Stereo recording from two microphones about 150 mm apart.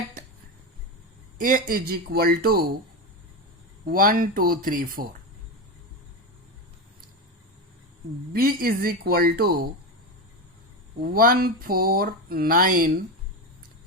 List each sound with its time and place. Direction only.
1.4 s speech: 65° right (ahead or behind); by 2.7 s 80° right
3.8 s speech: 70° right (ahead or behind)
8.3 s speech: 80° right
11.0 s speech: 75° right (ahead or behind)